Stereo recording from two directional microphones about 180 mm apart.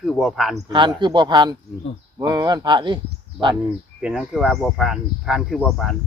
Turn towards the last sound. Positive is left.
turn(degrees=0)  # may be behind; listen again after turning